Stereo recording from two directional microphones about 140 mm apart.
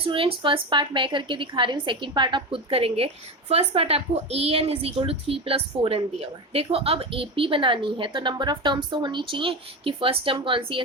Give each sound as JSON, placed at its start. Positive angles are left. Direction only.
{"t": 0.0, "sound": "a woman's voice", "side_deg": -40}